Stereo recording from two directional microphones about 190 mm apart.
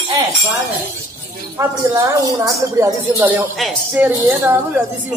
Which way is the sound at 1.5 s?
15° right (ahead or behind).